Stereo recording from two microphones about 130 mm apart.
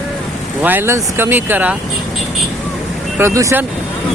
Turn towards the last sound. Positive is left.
turn(degrees=-25)  # may be behind; listen again after turning